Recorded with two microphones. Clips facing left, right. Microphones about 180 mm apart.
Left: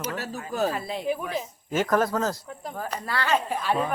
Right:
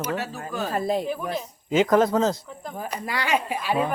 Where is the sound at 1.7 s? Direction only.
15° right (ahead or behind).